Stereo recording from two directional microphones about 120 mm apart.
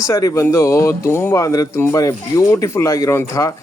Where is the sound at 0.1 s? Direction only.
30° left (ahead or behind).